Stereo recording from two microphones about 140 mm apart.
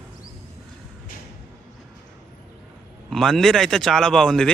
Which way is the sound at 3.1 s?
Centre (ahead or behind).